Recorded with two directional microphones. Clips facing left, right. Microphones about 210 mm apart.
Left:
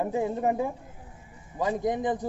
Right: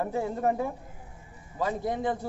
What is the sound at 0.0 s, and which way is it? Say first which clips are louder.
A man's voice: left 1 dB; 15° left (ahead or behind).